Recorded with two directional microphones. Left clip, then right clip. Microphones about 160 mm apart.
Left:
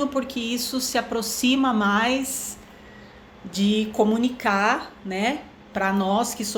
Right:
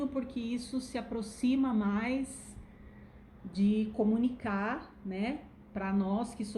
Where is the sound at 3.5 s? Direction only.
15° right (ahead or behind).